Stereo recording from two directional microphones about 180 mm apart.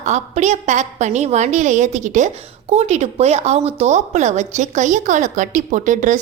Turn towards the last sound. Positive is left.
turn(degrees=-45)  # may be behind; listen again after turning